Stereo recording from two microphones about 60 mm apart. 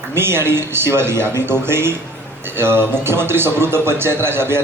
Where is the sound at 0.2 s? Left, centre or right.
Right.